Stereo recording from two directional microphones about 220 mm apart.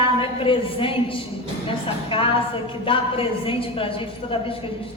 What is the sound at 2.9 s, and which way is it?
A woman's voice, 25° left (ahead or behind).